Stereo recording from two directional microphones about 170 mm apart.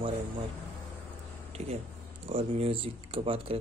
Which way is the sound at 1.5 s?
40° right (ahead or behind).